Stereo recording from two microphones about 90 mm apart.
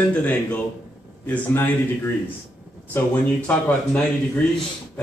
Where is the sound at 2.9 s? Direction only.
20° left (ahead or behind).